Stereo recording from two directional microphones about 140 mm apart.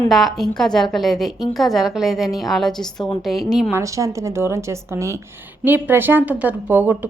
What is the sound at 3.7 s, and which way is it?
A woman's voice, 20° right (ahead or behind).